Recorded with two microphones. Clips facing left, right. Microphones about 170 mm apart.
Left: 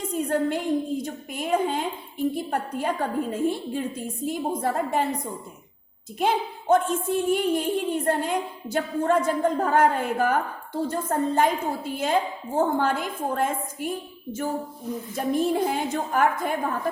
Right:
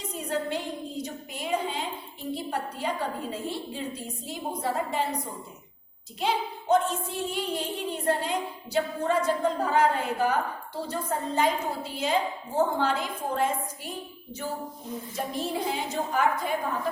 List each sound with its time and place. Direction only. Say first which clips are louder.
0.0 s a woman's voice: left 6 dB; 50° left (ahead or behind)
6.1 s a woman's voice: left 4 dB; 50° left (ahead or behind)
15.1 s a woman's voice: left 8 dB; 50° left (ahead or behind)